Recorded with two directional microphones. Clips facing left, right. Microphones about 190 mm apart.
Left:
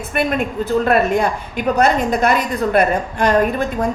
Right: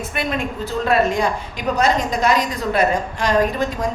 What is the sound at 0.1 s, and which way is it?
A woman's voice, 50° left (ahead or behind).